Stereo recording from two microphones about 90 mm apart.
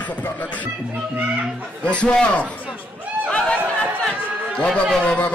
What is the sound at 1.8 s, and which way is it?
Music, 10° left (ahead or behind).